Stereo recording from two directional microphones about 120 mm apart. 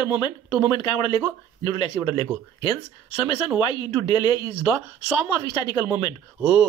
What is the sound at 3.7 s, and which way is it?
Speech, 40° left (ahead or behind).